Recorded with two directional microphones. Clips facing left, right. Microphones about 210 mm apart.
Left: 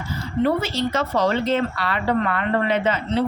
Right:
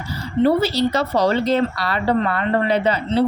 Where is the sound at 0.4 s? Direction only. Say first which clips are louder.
Right 5 dB; 35° right (ahead or behind).